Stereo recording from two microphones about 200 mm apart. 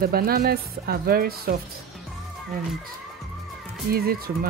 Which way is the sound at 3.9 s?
50° right (ahead or behind).